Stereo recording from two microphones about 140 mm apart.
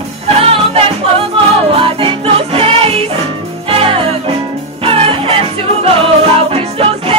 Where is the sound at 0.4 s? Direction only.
45° right (ahead or behind).